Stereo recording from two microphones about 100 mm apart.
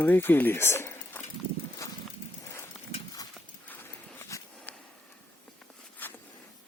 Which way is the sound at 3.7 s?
20° left (ahead or behind).